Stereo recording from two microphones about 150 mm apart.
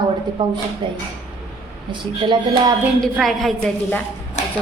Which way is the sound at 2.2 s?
30° right (ahead or behind).